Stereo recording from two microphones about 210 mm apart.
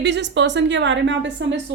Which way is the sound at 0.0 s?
55° right (ahead or behind).